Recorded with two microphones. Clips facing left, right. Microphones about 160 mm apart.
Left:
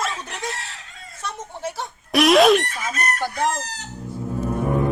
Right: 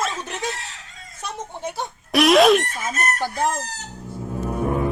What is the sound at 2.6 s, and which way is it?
Chicken, 45° right (ahead or behind).